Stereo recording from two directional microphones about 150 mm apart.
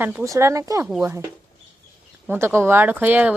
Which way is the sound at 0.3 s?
20° right (ahead or behind).